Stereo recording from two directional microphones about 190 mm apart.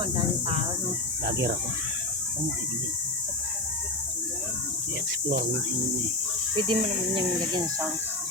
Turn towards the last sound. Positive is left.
turn(degrees=-25)  # may be behind; listen again after turning